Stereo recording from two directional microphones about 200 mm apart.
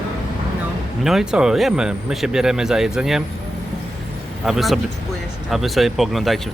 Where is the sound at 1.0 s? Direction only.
Centre (ahead or behind).